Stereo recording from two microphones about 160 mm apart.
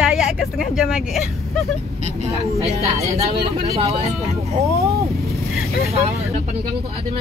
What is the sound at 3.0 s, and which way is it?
Speech, 40° right (ahead or behind).